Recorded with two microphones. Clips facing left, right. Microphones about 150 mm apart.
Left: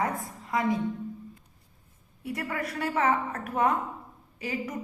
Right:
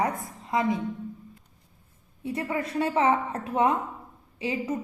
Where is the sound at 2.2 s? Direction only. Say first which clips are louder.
Right 3 dB; 25° right (ahead or behind).